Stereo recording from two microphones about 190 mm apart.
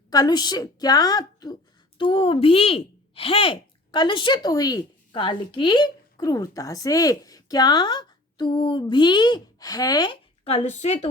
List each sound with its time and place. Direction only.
0.1 s a woman's voice: 20° left (ahead or behind)